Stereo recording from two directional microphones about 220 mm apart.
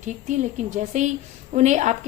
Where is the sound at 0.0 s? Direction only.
35° right (ahead or behind).